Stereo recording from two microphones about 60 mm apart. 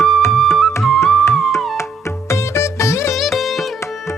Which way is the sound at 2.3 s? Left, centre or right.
Left.